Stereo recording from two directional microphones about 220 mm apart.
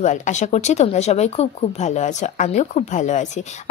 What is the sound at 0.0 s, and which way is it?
A woman's voice, 35° left (ahead or behind).